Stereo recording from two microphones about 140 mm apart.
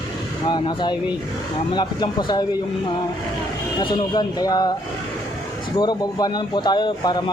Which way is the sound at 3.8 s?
35° left (ahead or behind).